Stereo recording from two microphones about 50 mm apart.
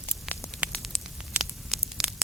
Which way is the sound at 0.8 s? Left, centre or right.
Centre.